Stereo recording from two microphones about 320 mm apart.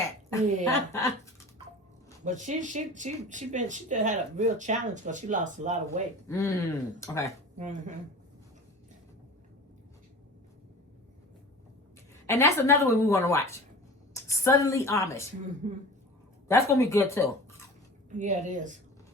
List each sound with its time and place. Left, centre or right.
0.3 s a woman's voice: centre
2.2 s speech: right
6.2 s a woman's voice: centre
7.6 s speech: right
12.2 s a woman's voice: centre
15.6 s speech: right
16.5 s a woman's voice: centre
18.2 s speech: right